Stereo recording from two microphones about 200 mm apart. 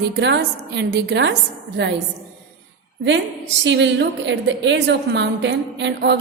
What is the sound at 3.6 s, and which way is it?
A woman's voice, 65° right (ahead or behind).